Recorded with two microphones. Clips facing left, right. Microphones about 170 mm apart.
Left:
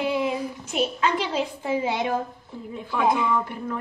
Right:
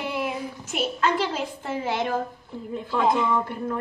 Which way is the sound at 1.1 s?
50° right (ahead or behind).